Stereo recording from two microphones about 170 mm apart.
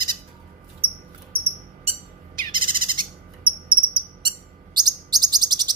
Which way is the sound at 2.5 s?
55° right (ahead or behind).